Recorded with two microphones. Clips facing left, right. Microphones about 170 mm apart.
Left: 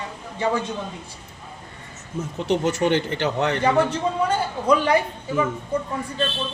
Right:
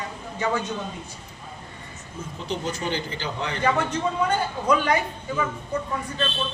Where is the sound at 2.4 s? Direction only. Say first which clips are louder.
Left 8 dB; 70° left (ahead or behind).